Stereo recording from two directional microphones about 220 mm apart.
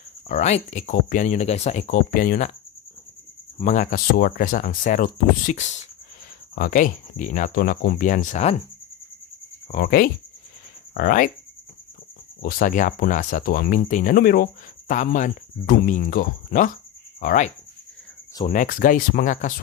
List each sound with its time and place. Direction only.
0.3 s speech: 30° left (ahead or behind)
3.5 s speech: 35° left (ahead or behind)
9.7 s speech: 40° left (ahead or behind)
12.4 s speech: 40° left (ahead or behind)